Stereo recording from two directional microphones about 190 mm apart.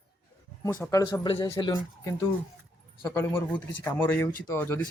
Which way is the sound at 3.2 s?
10° left (ahead or behind).